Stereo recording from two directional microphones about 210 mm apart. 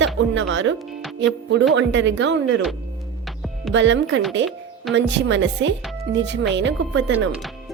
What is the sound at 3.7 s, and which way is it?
Speech, 60° right (ahead or behind).